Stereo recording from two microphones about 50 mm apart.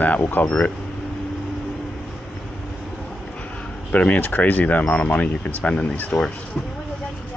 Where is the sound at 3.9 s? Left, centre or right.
Left.